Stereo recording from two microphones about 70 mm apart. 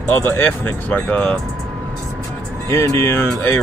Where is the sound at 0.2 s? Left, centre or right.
Left.